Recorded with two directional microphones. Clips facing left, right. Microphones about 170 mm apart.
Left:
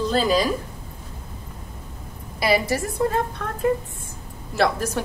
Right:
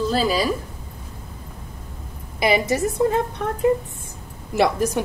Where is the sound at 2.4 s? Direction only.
20° right (ahead or behind).